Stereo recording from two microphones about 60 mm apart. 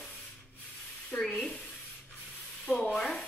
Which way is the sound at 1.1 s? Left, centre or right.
Left.